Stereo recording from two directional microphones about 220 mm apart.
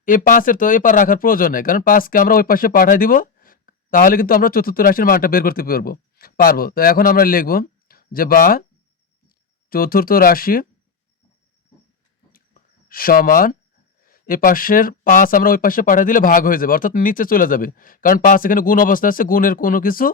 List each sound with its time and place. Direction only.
0.0 s speech: 40° left (ahead or behind)
9.6 s speech: 40° left (ahead or behind)
12.3 s a sound: 40° left (ahead or behind)
14.0 s speech: 40° left (ahead or behind)